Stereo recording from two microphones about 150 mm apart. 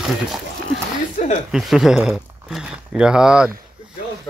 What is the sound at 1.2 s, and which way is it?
Speech, 50° left (ahead or behind).